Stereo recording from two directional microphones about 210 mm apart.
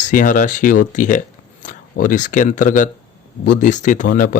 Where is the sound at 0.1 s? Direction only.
40° left (ahead or behind).